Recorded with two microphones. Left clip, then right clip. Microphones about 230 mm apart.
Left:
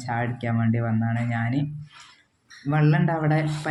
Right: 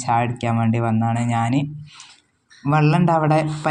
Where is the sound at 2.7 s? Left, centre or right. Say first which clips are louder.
Right 7 dB; right.